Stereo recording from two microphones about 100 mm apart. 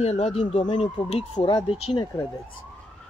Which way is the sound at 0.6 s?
55° left (ahead or behind).